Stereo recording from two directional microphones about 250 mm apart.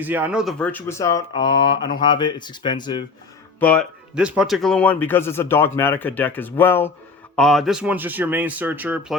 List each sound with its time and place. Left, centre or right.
0.0 s speech: centre
3.6 s speech: centre